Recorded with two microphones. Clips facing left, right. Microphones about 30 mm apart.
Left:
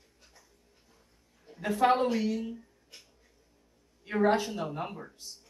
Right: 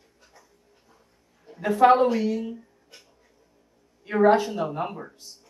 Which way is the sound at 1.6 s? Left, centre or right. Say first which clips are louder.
Right 8 dB; right.